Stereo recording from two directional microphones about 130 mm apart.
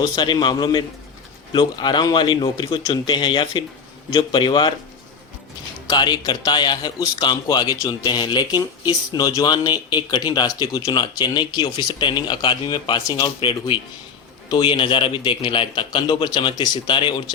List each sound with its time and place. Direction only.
0.0 s a man's voice: 30° left (ahead or behind)
5.9 s a man's voice: 35° left (ahead or behind)
14.5 s a man's voice: 40° left (ahead or behind)